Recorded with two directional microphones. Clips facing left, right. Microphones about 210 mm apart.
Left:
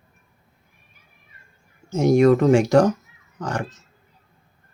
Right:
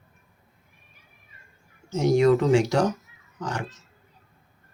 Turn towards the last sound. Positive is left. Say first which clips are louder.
# left 4 dB
turn(degrees=50)  # may be behind; listen again after turning